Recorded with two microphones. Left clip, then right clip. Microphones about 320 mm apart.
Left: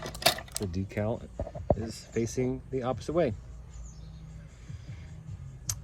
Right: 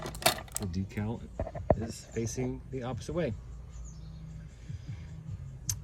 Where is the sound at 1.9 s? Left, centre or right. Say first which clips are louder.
Left 4 dB; centre.